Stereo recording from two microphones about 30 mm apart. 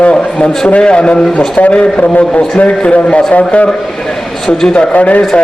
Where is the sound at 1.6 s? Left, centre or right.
Left.